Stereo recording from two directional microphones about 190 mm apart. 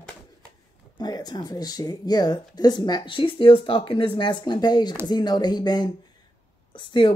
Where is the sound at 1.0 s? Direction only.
20° left (ahead or behind).